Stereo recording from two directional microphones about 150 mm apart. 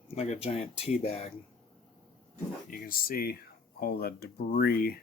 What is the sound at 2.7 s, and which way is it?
Speech, 70° left (ahead or behind).